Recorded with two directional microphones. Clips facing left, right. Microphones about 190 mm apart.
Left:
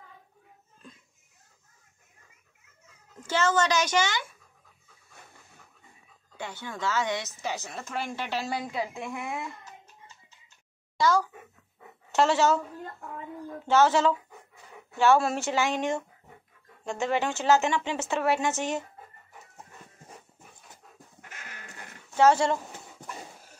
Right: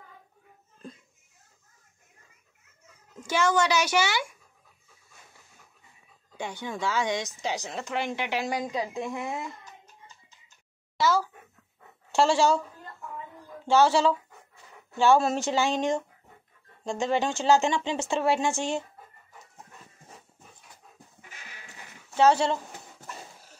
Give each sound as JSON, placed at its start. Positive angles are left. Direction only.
{"t": 3.2, "sound": "speech", "side_deg": -10}
{"t": 6.3, "sound": "speech", "side_deg": -15}
{"t": 11.0, "sound": "a child's voice", "side_deg": -5}
{"t": 13.7, "sound": "speech", "side_deg": -10}
{"t": 18.1, "sound": "speech", "side_deg": -30}
{"t": 21.2, "sound": "goat", "side_deg": 60}